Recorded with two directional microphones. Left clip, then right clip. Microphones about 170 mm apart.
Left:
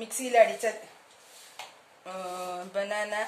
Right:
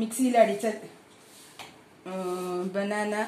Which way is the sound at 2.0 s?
Centre (ahead or behind).